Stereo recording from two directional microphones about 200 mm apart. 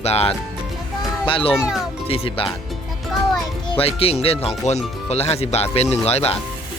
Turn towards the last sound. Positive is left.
turn(degrees=30)  # may be behind; listen again after turning